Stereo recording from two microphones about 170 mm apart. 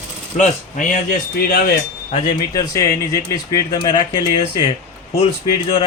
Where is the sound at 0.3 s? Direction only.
50° left (ahead or behind).